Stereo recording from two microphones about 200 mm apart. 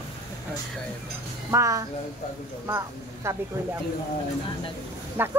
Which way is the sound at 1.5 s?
15° right (ahead or behind).